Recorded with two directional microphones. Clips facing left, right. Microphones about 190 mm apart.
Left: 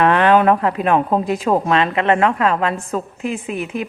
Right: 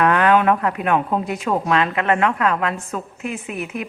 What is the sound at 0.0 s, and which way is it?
A woman's voice, 30° left (ahead or behind).